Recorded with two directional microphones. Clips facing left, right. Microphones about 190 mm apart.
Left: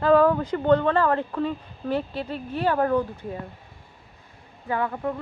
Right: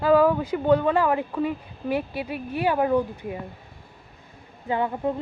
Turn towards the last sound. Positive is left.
turn(degrees=-20)  # may be behind; listen again after turning